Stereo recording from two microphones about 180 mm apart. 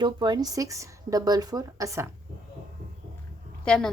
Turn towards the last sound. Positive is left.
turn(degrees=5)  # may be behind; listen again after turning